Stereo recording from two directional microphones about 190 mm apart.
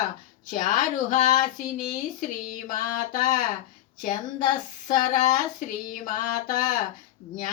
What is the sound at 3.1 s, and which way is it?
Speech, 40° left (ahead or behind).